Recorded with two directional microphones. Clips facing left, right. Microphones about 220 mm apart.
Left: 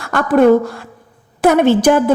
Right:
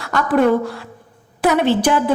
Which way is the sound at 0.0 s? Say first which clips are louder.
Left 2 dB; 50° left (ahead or behind).